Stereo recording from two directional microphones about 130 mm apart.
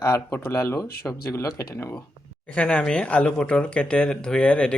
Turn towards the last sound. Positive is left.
turn(degrees=10)  # may be behind; listen again after turning